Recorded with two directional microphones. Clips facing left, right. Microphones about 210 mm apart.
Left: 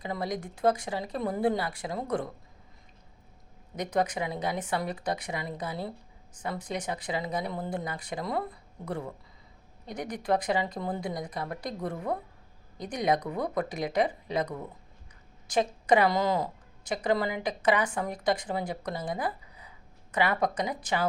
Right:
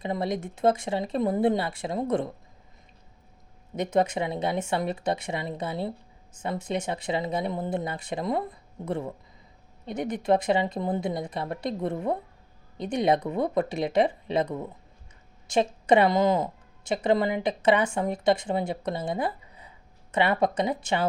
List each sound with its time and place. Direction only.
0.0 s speech: 25° right (ahead or behind)
3.8 s a woman's voice: 25° right (ahead or behind)